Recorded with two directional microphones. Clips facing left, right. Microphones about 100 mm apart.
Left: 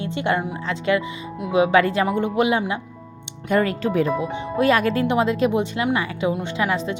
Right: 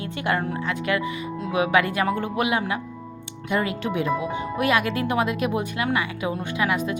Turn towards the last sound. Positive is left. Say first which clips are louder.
# left 1 dB
turn(degrees=30)  # may be behind; listen again after turning